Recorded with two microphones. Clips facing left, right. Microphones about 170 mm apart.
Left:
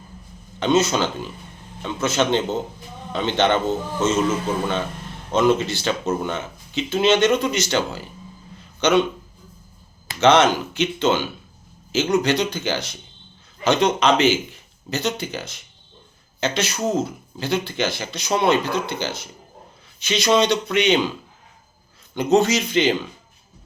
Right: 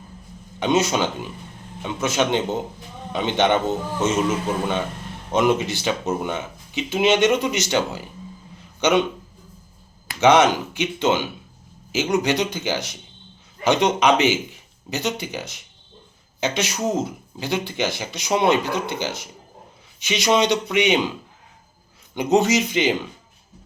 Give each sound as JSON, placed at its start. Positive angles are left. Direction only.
{"t": 0.6, "sound": "a man's voice", "side_deg": -15}
{"t": 10.2, "sound": "speech", "side_deg": -15}
{"t": 22.1, "sound": "speech", "side_deg": -15}